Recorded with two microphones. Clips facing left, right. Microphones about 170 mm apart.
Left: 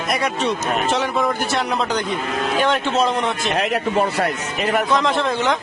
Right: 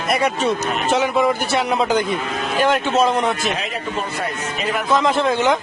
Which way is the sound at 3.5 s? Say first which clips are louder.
Left 6 dB; 70° left (ahead or behind).